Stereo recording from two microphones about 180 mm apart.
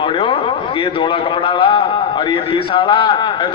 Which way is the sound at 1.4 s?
30° left (ahead or behind).